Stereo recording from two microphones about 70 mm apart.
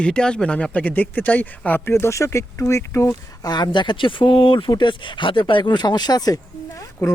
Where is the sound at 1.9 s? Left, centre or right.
Left.